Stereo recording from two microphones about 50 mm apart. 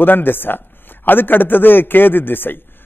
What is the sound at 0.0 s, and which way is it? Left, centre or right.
A man's voice, left.